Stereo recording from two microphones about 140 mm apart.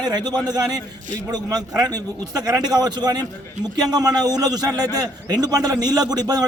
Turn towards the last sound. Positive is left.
turn(degrees=-30)  # may be behind; listen again after turning